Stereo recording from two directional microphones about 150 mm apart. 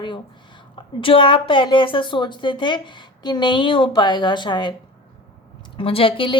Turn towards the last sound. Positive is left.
turn(degrees=35)  # may be behind; listen again after turning